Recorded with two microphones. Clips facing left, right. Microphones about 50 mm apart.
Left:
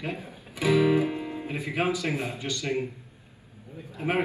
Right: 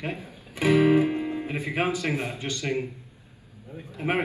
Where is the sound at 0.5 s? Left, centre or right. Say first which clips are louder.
Right 2 dB; right.